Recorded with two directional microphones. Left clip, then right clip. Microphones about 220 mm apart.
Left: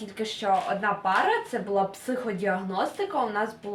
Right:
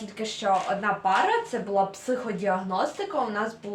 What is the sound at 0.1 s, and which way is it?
Speech, 5° left (ahead or behind).